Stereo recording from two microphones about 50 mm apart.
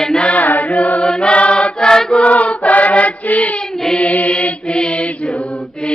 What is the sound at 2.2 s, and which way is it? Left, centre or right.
Choir, left.